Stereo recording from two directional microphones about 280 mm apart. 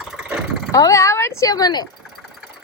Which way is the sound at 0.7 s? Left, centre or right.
Centre.